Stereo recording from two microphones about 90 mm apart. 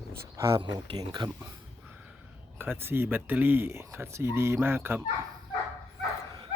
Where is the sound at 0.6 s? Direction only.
55° right (ahead or behind).